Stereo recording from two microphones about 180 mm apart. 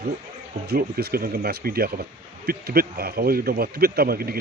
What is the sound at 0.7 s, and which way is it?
A man's voice, 60° right (ahead or behind).